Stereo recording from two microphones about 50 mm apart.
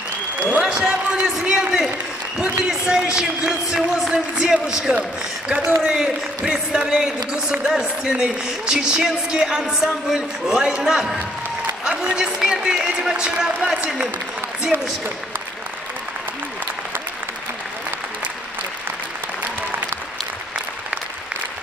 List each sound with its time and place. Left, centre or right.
0.5 s applause: centre
2.3 s a man's voice: centre
12.2 s a man's voice: centre
14.7 s speech: right